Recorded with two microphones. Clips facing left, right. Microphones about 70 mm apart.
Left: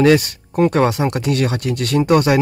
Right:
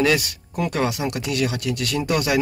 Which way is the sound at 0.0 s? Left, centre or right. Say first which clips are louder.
Left 7 dB; left.